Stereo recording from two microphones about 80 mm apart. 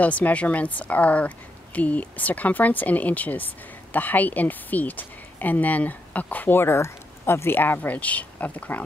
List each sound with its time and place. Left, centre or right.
0.0 s a woman's voice: centre